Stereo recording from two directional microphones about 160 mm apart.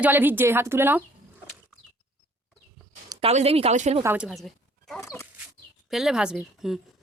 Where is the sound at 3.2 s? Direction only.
40° right (ahead or behind).